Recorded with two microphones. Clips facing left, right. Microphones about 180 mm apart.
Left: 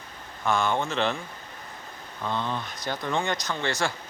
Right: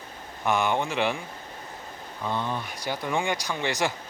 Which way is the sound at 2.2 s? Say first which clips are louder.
Even; 10° right (ahead or behind).